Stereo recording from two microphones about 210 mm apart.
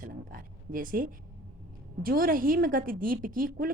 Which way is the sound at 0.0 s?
40° right (ahead or behind).